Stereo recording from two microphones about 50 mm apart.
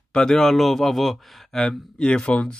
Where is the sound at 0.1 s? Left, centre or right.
Centre.